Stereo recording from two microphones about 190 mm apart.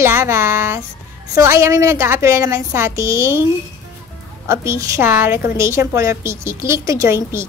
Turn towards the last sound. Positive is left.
turn(degrees=-15)  # may be behind; listen again after turning